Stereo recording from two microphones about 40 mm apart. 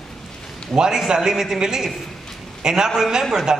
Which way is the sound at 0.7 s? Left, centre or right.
Centre.